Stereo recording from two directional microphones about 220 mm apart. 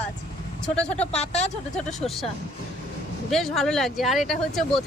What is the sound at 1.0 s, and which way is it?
Speech, 30° left (ahead or behind).